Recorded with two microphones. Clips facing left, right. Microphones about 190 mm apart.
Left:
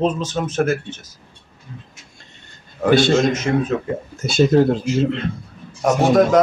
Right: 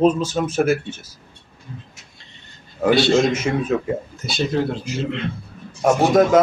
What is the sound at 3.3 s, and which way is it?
Speech, 10° right (ahead or behind).